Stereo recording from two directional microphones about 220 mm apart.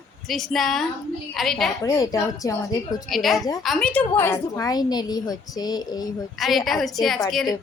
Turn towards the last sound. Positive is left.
turn(degrees=0)  # may be behind; listen again after turning